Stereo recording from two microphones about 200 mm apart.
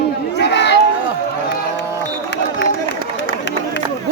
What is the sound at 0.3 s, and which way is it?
Chatter, 60° left (ahead or behind).